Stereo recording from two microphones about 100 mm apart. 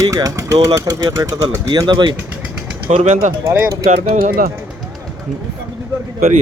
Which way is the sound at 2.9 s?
90° right.